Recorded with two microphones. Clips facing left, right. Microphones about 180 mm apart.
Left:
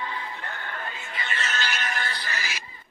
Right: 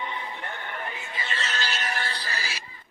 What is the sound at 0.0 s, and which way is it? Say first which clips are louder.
Music: even; 20° right (ahead or behind).